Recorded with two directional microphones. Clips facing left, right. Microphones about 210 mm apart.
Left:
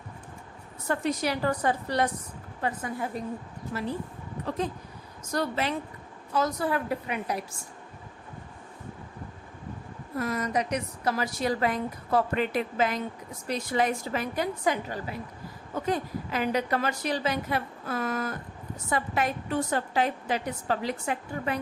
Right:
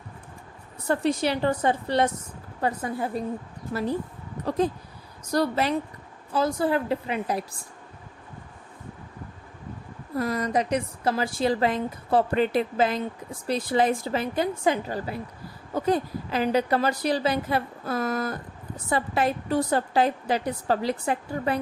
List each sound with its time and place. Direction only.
0.9 s a woman's voice: 30° right (ahead or behind)
4.4 s a woman's voice: 35° right (ahead or behind)
10.2 s a woman's voice: 35° right (ahead or behind)